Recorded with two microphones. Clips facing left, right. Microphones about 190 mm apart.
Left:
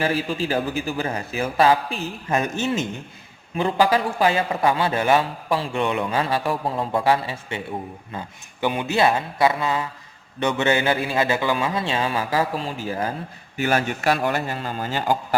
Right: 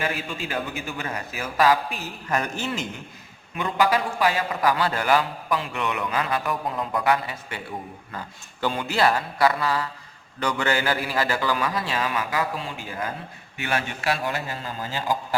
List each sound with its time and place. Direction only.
0.0 s a man's voice: 30° left (ahead or behind)
8.6 s a man's voice: 20° left (ahead or behind); by 14.2 s 40° left (ahead or behind)
14.2 s a man's voice: 60° left (ahead or behind)